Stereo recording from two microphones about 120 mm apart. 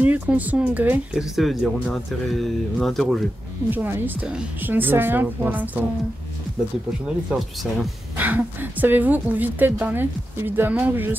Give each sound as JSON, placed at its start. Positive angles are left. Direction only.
{"t": 0.0, "sound": "a woman's voice", "side_deg": -15}
{"t": 1.1, "sound": "speech", "side_deg": 0}
{"t": 3.7, "sound": "a woman's voice", "side_deg": -15}
{"t": 7.2, "sound": "speech", "side_deg": 0}
{"t": 8.2, "sound": "a woman's voice", "side_deg": -15}